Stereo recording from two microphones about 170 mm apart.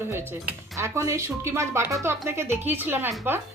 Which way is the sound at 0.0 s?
15° right (ahead or behind).